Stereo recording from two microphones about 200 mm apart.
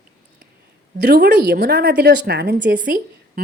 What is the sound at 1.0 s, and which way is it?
A woman's voice, 55° right (ahead or behind).